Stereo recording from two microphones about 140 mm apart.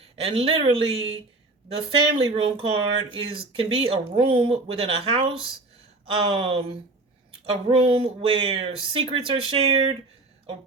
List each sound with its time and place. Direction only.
0.2 s speech: 45° right (ahead or behind)